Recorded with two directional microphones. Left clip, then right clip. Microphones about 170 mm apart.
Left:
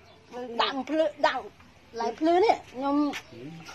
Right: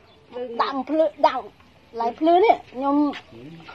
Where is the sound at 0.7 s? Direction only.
25° right (ahead or behind).